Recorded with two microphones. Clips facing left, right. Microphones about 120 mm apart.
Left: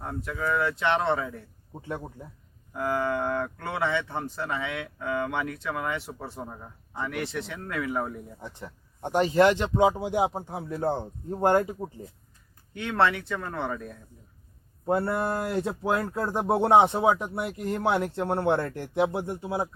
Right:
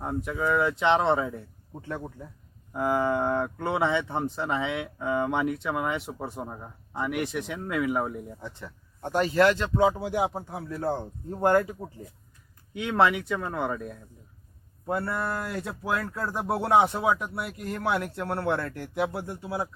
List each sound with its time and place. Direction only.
0.0 s speech: 15° right (ahead or behind)
2.7 s speech: 20° right (ahead or behind)
8.4 s speech: 20° left (ahead or behind)
12.7 s speech: 10° right (ahead or behind)
14.8 s speech: 25° left (ahead or behind)